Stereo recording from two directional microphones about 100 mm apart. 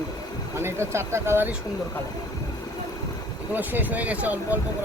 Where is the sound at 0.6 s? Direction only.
25° right (ahead or behind).